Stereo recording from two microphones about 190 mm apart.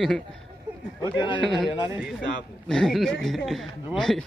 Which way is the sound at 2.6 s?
5° left (ahead or behind).